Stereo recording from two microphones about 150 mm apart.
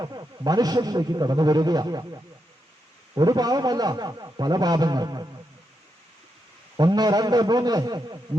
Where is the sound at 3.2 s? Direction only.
25° right (ahead or behind).